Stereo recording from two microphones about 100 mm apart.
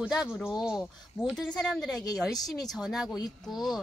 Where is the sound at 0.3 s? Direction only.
20° left (ahead or behind).